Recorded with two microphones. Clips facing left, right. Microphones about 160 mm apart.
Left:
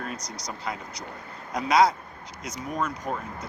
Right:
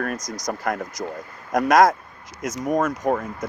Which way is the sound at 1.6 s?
90° right.